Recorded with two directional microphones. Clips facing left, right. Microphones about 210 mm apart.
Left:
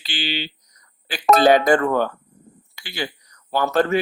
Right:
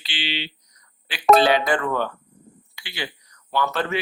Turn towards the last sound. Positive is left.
turn(degrees=45)  # may be behind; listen again after turning